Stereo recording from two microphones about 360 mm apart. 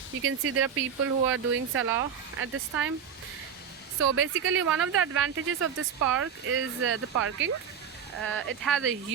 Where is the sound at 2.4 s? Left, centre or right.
Right.